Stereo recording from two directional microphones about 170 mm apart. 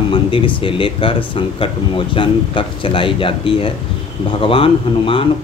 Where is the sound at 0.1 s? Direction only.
30° left (ahead or behind).